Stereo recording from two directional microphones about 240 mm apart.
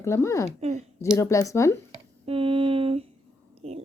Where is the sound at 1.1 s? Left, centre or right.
Centre.